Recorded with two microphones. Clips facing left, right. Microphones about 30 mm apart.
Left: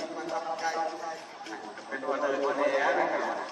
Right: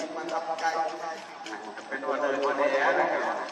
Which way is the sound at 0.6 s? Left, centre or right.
Centre.